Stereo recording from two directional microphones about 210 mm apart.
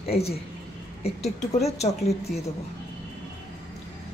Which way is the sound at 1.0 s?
30° left (ahead or behind).